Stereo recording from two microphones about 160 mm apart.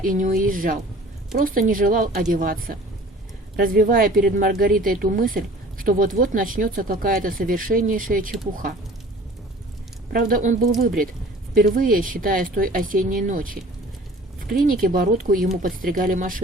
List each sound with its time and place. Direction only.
0.0 s speech: 60° right (ahead or behind)
10.1 s speech: 65° right (ahead or behind)